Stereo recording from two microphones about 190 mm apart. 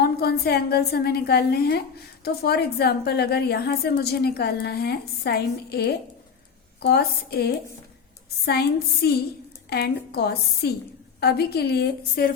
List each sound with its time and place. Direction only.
0.0 s a woman's voice: 55° left (ahead or behind)